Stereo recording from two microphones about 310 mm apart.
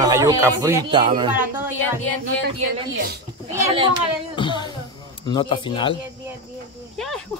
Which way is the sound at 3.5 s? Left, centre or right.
Centre.